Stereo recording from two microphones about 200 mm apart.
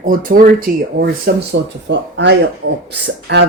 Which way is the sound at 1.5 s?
65° right (ahead or behind).